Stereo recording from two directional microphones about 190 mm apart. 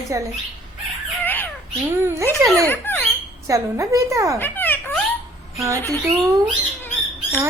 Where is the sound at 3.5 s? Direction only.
15° right (ahead or behind).